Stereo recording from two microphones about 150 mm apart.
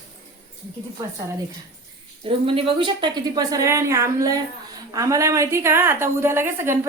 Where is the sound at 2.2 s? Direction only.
35° right (ahead or behind).